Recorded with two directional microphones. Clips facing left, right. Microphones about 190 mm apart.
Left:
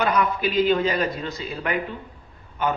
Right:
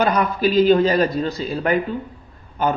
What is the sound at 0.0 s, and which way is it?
A man's voice, 35° right (ahead or behind).